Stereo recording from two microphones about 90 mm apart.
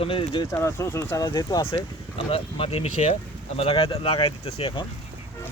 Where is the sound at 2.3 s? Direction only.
90° left.